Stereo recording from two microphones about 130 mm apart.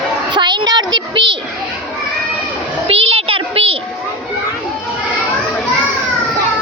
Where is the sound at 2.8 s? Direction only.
45° right (ahead or behind).